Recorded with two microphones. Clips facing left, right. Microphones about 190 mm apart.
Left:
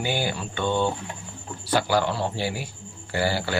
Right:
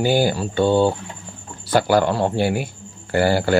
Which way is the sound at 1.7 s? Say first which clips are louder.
Right 6 dB; 50° right (ahead or behind).